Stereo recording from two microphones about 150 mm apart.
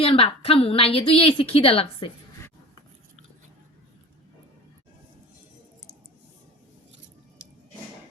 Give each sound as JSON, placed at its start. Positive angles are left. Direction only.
{"t": 0.0, "sound": "a woman's voice", "side_deg": 40}